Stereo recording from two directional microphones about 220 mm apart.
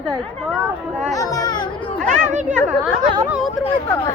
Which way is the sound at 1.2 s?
15° left (ahead or behind).